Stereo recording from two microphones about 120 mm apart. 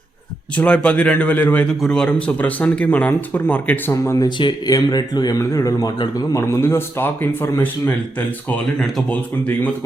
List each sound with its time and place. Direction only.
0.5 s speech: 10° left (ahead or behind)
3.9 s a man's voice: 25° left (ahead or behind)
4.3 s a man's voice: 40° left (ahead or behind); by 9.7 s 15° left (ahead or behind)